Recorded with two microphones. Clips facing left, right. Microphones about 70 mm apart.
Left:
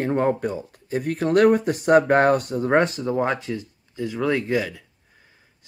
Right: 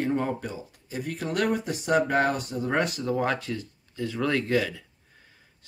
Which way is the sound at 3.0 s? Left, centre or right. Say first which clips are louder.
Left 3 dB; left.